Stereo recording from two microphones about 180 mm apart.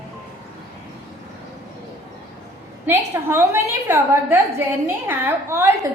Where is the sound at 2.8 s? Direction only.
15° right (ahead or behind).